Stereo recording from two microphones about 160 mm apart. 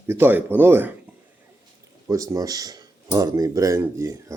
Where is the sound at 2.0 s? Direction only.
20° right (ahead or behind).